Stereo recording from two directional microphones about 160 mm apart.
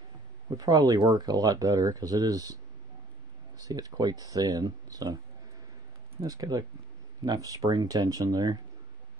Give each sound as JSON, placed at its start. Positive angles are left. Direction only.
{"t": 0.6, "sound": "speech", "side_deg": -25}
{"t": 6.2, "sound": "speech", "side_deg": -25}